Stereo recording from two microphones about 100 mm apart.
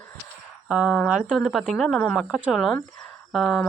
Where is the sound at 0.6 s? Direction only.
5° right (ahead or behind).